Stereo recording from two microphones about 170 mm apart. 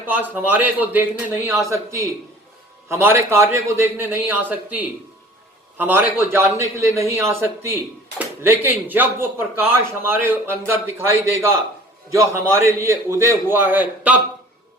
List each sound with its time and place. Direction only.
0.0 s speech: 10° right (ahead or behind)